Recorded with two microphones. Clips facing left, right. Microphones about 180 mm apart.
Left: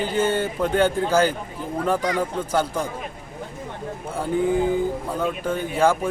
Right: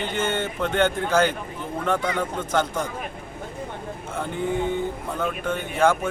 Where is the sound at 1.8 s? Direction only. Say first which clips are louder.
Left 2 dB; 10° left (ahead or behind).